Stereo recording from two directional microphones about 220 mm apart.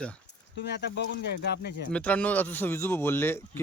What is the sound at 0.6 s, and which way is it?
Speech, 50° left (ahead or behind).